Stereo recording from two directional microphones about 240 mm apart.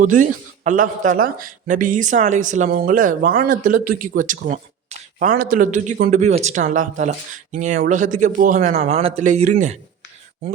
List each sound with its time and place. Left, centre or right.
0.0 s a man's voice: right